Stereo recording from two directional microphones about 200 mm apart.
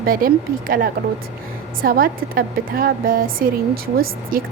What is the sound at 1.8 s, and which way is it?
Speech, 45° right (ahead or behind).